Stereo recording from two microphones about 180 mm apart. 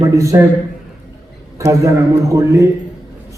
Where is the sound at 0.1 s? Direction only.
15° right (ahead or behind).